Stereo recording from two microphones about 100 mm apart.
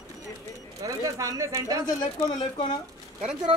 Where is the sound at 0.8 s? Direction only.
35° right (ahead or behind).